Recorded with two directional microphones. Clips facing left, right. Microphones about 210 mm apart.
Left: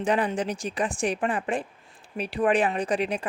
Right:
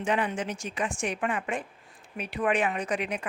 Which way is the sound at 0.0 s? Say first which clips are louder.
Left 4 dB; 35° left (ahead or behind).